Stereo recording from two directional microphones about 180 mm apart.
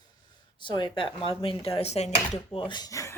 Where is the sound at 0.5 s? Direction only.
25° left (ahead or behind).